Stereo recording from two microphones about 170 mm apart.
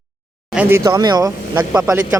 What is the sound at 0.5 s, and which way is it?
Speech, 10° right (ahead or behind).